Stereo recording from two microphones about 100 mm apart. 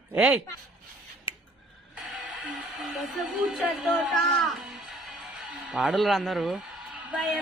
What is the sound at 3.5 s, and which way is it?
Speech, 5° right (ahead or behind).